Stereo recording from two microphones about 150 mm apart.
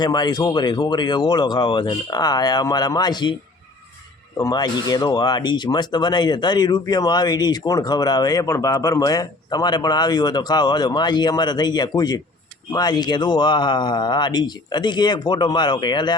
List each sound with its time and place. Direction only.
0.0 s speech: 30° left (ahead or behind)
4.4 s speech: 25° left (ahead or behind)